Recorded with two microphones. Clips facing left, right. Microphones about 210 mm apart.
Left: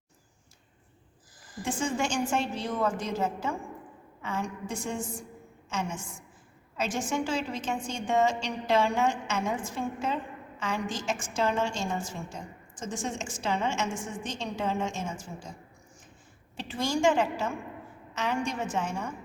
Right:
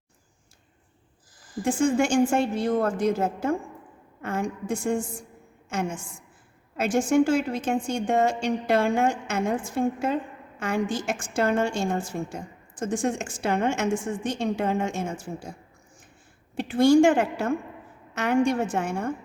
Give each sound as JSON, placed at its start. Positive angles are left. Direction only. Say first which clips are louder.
{"t": 1.6, "sound": "a woman's voice", "louder": "right 8 dB", "side_deg": -50}
{"t": 6.7, "sound": "a woman's voice", "louder": "right 9 dB", "side_deg": -50}
{"t": 16.6, "sound": "a woman's voice", "louder": "right 12 dB", "side_deg": -55}